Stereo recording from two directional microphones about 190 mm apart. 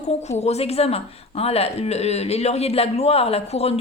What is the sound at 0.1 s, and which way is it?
A woman's voice, 35° left (ahead or behind).